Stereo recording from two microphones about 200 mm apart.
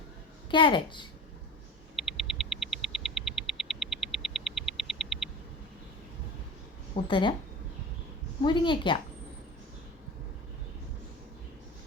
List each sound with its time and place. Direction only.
0.5 s a woman's voice: 25° left (ahead or behind)
2.0 s a sound: centre (ahead or behind)
6.9 s a woman's voice: 25° left (ahead or behind)
8.4 s a woman's voice: 25° left (ahead or behind)